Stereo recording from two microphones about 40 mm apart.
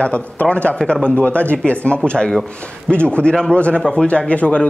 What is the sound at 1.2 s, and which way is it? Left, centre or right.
A man's voice, left.